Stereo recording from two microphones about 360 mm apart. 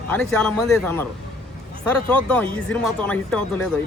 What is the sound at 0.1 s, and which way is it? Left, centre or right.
Speech, centre.